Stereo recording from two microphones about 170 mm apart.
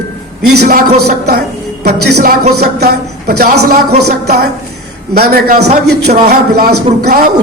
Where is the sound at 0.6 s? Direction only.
70° right (ahead or behind).